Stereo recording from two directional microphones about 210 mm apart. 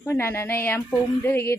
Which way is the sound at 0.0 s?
10° left (ahead or behind).